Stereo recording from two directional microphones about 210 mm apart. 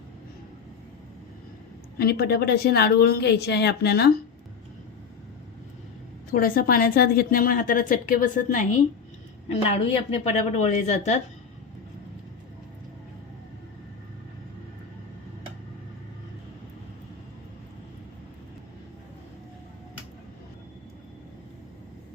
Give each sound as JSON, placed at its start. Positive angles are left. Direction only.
{"t": 2.0, "sound": "a woman's voice", "side_deg": 50}
{"t": 6.3, "sound": "a woman's voice", "side_deg": 45}
{"t": 9.5, "sound": "a woman's voice", "side_deg": 30}